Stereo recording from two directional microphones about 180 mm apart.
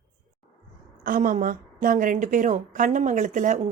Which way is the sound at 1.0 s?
50° right (ahead or behind).